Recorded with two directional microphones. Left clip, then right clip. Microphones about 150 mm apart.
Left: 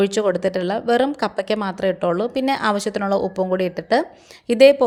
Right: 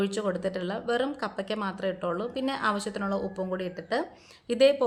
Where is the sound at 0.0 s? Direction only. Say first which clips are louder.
Left 11 dB; 45° left (ahead or behind).